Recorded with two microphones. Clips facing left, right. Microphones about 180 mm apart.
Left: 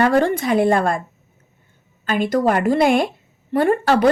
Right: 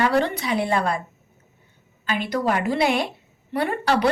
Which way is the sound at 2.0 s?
45° left (ahead or behind).